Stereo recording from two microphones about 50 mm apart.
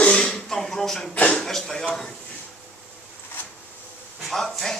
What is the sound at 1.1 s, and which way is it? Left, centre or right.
Speech, left.